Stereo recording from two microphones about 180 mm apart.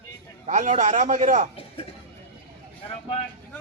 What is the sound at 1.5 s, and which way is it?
Speech, 30° left (ahead or behind).